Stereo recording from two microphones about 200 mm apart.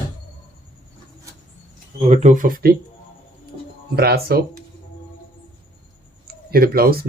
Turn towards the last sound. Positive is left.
turn(degrees=-50)  # may be behind; listen again after turning